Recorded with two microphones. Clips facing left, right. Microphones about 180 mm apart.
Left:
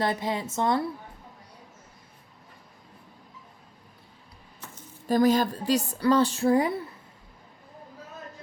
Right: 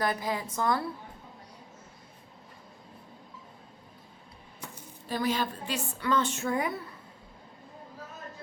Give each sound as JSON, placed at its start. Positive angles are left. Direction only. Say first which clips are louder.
{"t": 0.0, "sound": "a woman's voice", "louder": "left 3 dB", "side_deg": 25}
{"t": 5.0, "sound": "a woman's voice", "louder": "left 8 dB", "side_deg": 45}